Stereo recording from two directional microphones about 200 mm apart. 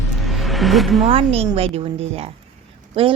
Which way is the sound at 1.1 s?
30° right (ahead or behind).